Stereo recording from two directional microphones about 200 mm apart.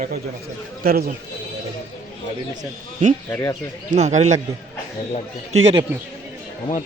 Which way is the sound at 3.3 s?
15° left (ahead or behind).